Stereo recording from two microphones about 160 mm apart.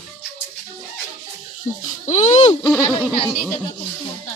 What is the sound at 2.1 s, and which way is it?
Speech, 45° left (ahead or behind).